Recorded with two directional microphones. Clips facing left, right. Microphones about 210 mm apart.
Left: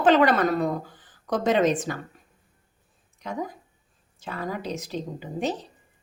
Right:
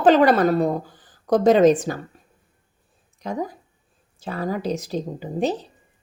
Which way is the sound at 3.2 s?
35° right (ahead or behind).